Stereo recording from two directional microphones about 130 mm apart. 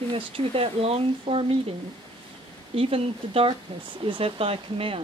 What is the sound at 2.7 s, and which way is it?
Speech, 45° right (ahead or behind).